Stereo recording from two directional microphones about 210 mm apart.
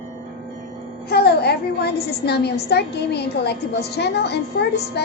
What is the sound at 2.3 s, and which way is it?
A woman's voice, 50° left (ahead or behind).